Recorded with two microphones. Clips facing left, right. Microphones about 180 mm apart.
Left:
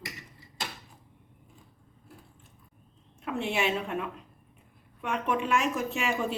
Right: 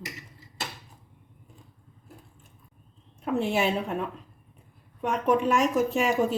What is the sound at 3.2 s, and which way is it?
Speech, 40° right (ahead or behind).